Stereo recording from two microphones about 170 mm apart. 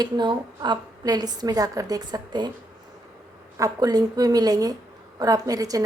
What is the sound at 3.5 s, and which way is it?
A woman's voice, 20° right (ahead or behind).